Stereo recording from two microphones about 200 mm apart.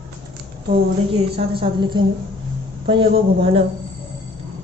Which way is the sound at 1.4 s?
25° right (ahead or behind).